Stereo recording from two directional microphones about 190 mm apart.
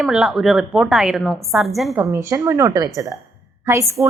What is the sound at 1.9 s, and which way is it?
A woman's voice, 15° right (ahead or behind).